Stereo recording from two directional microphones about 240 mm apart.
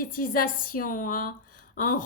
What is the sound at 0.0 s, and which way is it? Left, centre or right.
Speech, left.